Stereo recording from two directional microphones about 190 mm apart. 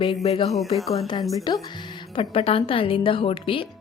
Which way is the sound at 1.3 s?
20° left (ahead or behind).